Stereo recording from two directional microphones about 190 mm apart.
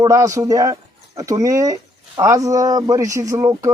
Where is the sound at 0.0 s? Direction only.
15° right (ahead or behind).